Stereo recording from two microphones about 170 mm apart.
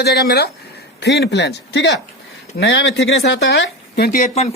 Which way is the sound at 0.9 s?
90° left.